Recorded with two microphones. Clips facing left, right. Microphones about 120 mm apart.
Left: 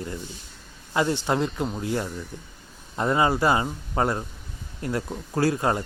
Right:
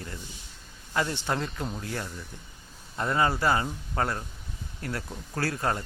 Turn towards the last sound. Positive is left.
turn(degrees=20)  # may be behind; listen again after turning